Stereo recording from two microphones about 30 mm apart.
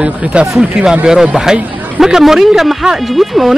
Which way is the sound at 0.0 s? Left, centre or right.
Right.